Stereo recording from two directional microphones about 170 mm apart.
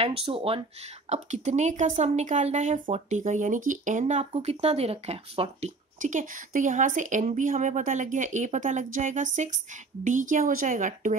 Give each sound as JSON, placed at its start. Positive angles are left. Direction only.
{"t": 0.0, "sound": "speech", "side_deg": -35}
{"t": 5.9, "sound": "speech", "side_deg": -50}